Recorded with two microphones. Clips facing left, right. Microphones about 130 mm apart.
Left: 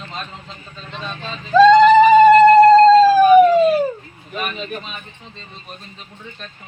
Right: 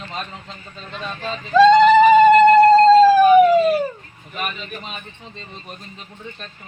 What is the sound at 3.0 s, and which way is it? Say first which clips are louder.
Police car: left 1 dB; 15° right (ahead or behind).